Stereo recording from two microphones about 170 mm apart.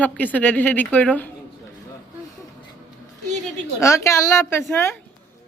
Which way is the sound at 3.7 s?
15° left (ahead or behind).